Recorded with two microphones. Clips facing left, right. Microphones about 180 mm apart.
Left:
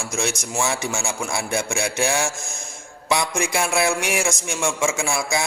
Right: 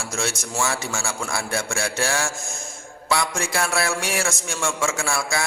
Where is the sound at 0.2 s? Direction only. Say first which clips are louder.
Left 1 dB; 15° left (ahead or behind).